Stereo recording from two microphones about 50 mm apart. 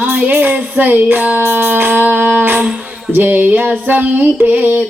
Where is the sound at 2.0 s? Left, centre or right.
Right.